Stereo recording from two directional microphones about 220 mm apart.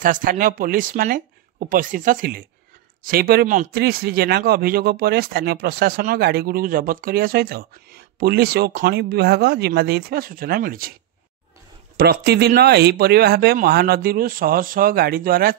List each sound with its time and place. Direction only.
0.0 s a man's voice: 40° right (ahead or behind)
12.0 s a man's voice: 45° right (ahead or behind)